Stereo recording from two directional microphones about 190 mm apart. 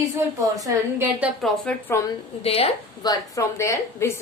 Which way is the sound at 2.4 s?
30° left (ahead or behind).